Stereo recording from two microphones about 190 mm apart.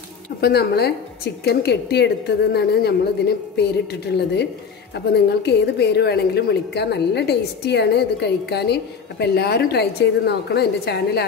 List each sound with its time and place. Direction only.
0.4 s a woman's voice: 60° left (ahead or behind)